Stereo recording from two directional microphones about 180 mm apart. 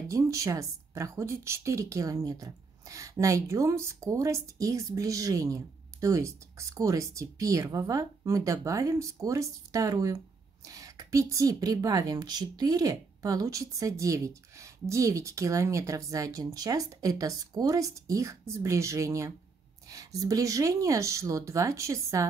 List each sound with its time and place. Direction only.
0.1 s a woman's voice: 15° right (ahead or behind)